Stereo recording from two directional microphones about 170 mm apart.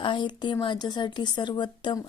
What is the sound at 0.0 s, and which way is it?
Speech, 30° left (ahead or behind).